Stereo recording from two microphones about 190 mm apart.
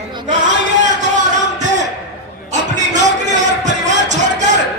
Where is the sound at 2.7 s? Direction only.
40° right (ahead or behind).